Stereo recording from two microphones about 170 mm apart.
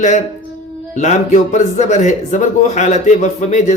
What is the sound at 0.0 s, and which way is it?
Speech, 45° left (ahead or behind).